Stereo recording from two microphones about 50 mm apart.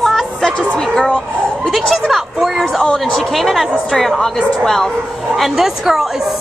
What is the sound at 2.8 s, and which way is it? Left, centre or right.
Speech, centre.